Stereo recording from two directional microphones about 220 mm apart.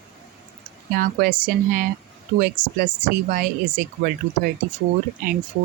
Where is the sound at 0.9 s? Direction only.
40° right (ahead or behind).